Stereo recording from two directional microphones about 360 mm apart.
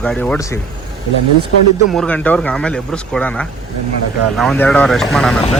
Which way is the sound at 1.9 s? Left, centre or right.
Centre.